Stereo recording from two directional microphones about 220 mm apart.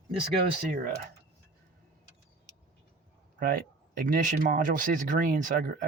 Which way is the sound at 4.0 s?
40° right (ahead or behind).